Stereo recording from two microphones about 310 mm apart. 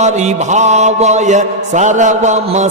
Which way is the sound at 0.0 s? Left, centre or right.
Right.